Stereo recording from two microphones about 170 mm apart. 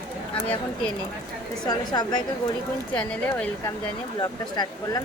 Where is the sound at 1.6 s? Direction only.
25° left (ahead or behind).